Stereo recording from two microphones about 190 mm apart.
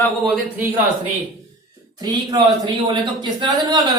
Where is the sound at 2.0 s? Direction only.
20° right (ahead or behind).